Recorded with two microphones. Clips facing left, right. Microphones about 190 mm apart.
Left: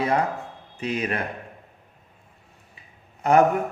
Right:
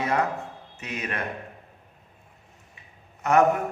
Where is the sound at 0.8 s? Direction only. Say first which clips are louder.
Left 7 dB; 30° left (ahead or behind).